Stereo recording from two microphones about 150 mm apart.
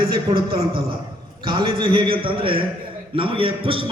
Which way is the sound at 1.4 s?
35° right (ahead or behind).